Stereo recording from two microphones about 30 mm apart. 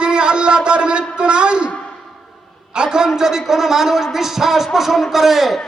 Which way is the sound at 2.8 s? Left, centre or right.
Right.